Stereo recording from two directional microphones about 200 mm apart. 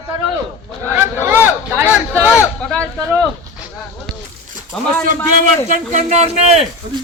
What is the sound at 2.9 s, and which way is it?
Speech, 15° right (ahead or behind).